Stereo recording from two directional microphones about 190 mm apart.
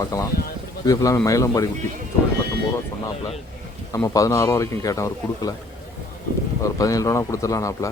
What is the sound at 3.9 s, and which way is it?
Speech, 15° left (ahead or behind).